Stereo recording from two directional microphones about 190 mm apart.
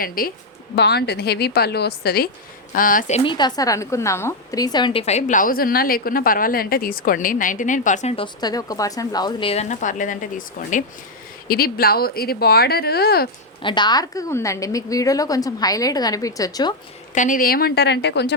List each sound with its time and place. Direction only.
0.2 s speech: 50° left (ahead or behind)
0.8 s a woman's voice: 60° left (ahead or behind)
3.2 s a woman's voice: 20° left (ahead or behind); by 13.2 s 55° left (ahead or behind)
13.6 s a woman's voice: 25° left (ahead or behind)
17.2 s a woman's voice: 45° left (ahead or behind); by 18.3 s 65° left (ahead or behind)